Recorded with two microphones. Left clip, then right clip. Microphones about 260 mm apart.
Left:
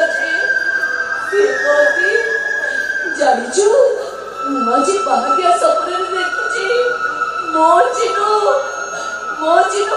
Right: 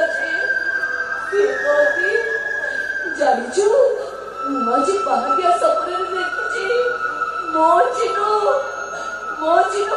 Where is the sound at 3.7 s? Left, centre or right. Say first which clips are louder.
Left 3 dB; centre.